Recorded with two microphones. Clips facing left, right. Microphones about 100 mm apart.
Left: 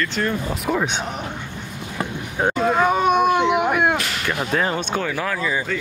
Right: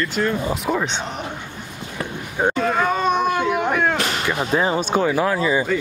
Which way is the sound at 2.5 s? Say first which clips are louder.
Left 5 dB; 10° left (ahead or behind).